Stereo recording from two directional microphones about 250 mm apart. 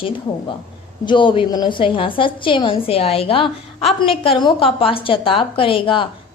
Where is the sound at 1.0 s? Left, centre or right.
Centre.